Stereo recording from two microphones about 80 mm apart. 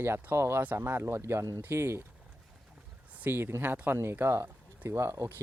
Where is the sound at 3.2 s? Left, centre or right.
Right.